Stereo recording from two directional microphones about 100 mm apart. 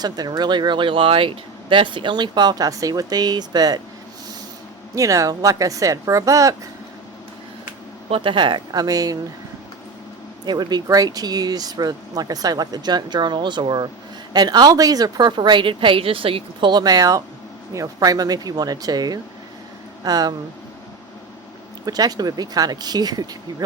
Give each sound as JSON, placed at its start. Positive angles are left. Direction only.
{"t": 0.0, "sound": "a woman's voice", "side_deg": -40}
{"t": 4.9, "sound": "speech", "side_deg": -35}
{"t": 8.1, "sound": "a woman's voice", "side_deg": -60}
{"t": 10.4, "sound": "a woman's voice", "side_deg": -45}
{"t": 21.8, "sound": "speech", "side_deg": -40}